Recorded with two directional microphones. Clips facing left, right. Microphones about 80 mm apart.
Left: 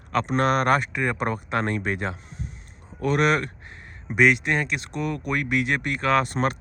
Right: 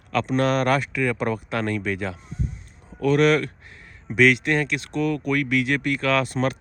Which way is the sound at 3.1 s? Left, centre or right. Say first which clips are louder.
Right 3 dB; centre.